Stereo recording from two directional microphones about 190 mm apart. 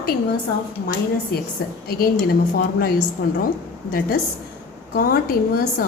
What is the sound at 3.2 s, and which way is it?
Speech, 65° left (ahead or behind).